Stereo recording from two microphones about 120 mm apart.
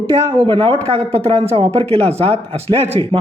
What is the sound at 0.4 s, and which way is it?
A man's voice, 45° right (ahead or behind).